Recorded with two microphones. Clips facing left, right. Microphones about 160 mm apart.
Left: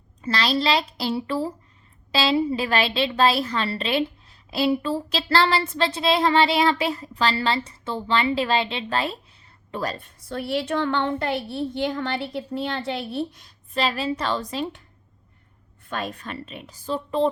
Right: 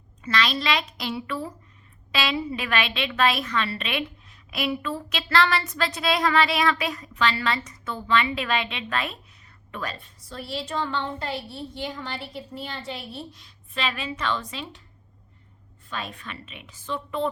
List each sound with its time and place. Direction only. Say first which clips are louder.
0.2 s a woman's voice: left 3 dB; 35° left (ahead or behind)
10.2 s a woman's voice: left 7 dB; 60° left (ahead or behind)
13.4 s a woman's voice: left 5 dB; 35° left (ahead or behind)
15.9 s a woman's voice: left 5 dB; 45° left (ahead or behind)